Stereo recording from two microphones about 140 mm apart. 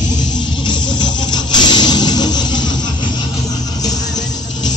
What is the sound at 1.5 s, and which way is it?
Vehicle, 30° left (ahead or behind).